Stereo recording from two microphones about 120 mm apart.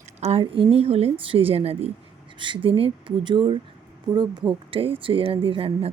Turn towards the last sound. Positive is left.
turn(degrees=-50)  # may be behind; listen again after turning